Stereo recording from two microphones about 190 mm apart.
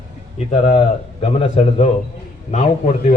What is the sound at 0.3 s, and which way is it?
A man's voice, 40° left (ahead or behind).